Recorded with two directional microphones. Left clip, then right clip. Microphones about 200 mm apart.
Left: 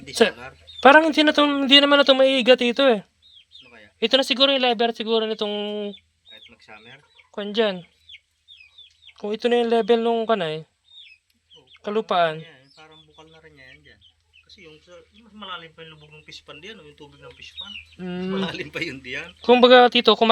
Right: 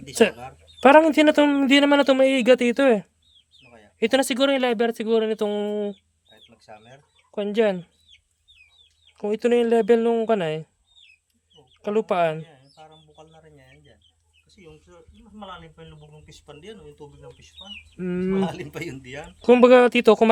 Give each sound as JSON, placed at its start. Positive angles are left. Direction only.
{"t": 0.8, "sound": "a man's voice", "side_deg": -25}
{"t": 6.3, "sound": "chicken", "side_deg": -45}
{"t": 6.9, "sound": "speech", "side_deg": -25}
{"t": 9.1, "sound": "a man's voice", "side_deg": -25}
{"t": 13.1, "sound": "a sound", "side_deg": -55}
{"t": 14.5, "sound": "chicken", "side_deg": -60}
{"t": 14.8, "sound": "a sound", "side_deg": -40}
{"t": 15.4, "sound": "speech", "side_deg": -55}
{"t": 18.3, "sound": "speech", "side_deg": -65}
{"t": 19.4, "sound": "speech", "side_deg": -35}